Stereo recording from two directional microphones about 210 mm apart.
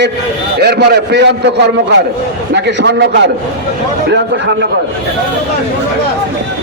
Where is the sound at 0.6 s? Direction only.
50° right (ahead or behind).